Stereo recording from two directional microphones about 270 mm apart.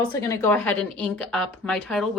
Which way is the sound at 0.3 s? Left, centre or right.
Centre.